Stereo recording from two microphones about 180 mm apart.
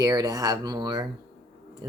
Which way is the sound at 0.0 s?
20° right (ahead or behind).